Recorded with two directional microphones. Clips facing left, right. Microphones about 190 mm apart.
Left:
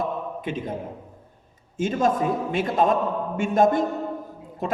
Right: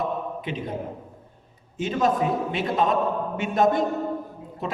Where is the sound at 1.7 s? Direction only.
45° left (ahead or behind).